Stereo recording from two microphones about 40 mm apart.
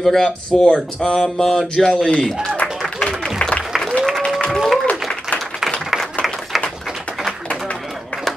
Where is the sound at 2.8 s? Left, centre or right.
Left.